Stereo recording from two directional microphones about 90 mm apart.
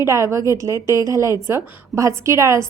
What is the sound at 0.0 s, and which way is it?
A woman's voice, 30° right (ahead or behind).